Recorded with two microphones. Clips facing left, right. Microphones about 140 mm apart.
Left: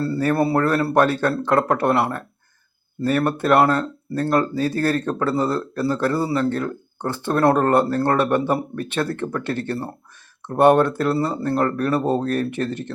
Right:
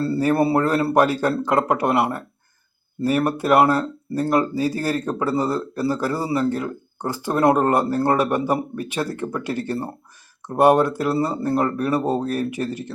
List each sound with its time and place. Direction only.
0.2 s a man's voice: 20° right (ahead or behind)